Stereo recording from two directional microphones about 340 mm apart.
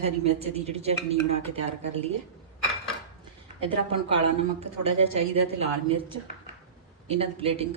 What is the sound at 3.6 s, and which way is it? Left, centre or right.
A woman's voice, centre.